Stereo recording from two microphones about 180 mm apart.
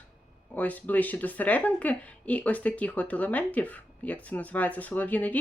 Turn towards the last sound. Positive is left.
turn(degrees=10)  # may be behind; listen again after turning